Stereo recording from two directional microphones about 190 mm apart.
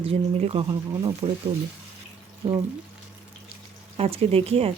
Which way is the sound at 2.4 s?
25° right (ahead or behind).